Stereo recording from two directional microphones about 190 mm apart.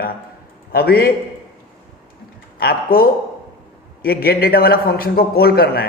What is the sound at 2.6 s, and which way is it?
A man's voice, 55° left (ahead or behind).